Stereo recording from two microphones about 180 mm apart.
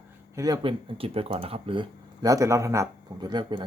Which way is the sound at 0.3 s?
20° right (ahead or behind).